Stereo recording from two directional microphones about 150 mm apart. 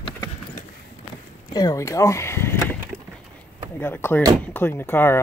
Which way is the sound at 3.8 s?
15° left (ahead or behind).